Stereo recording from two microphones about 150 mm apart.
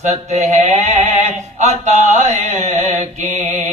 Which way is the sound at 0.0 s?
50° right (ahead or behind).